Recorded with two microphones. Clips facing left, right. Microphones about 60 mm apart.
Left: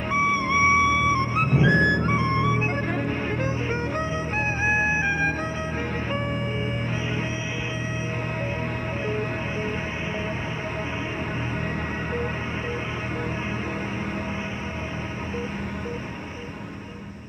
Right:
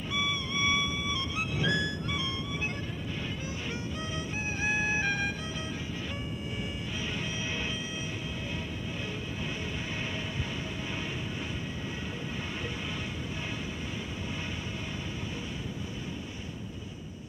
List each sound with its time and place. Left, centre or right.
0.1 s music: left
1.6 s music: left
1.9 s music: left
9.0 s music: left